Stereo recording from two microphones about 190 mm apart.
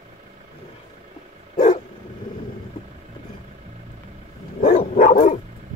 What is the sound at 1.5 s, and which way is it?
Dog, 40° left (ahead or behind).